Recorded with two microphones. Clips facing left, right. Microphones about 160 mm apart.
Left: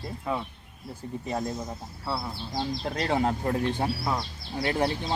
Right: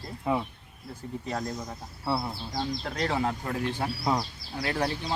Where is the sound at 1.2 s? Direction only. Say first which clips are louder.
Left 2 dB; 25° left (ahead or behind).